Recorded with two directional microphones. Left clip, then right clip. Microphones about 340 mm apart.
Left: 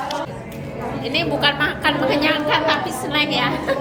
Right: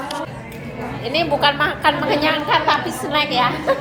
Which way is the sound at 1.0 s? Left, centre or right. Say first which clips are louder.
Right 2 dB; centre.